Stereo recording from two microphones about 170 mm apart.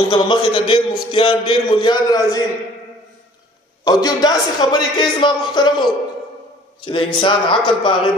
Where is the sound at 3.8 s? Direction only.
20° left (ahead or behind).